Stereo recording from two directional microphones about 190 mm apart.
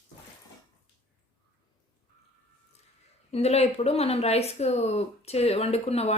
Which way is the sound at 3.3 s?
35° left (ahead or behind).